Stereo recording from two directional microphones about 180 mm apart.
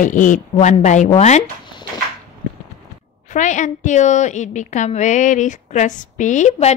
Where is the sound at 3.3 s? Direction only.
45° left (ahead or behind).